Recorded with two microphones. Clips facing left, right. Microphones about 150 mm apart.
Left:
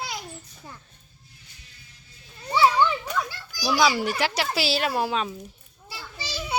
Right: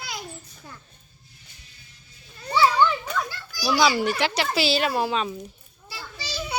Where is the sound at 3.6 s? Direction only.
Centre (ahead or behind).